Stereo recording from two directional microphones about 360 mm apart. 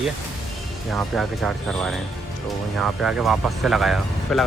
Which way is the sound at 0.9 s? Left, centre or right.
Centre.